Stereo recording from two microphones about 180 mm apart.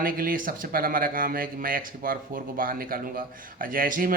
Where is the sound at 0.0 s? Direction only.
50° right (ahead or behind).